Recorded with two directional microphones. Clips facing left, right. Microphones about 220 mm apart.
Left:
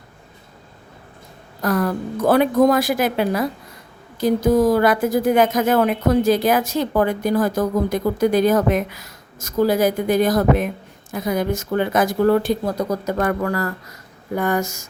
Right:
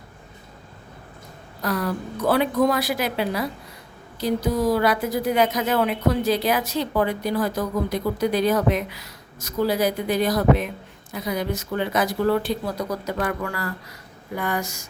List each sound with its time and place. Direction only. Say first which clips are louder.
1.6 s a woman's voice: left 5 dB; 50° left (ahead or behind)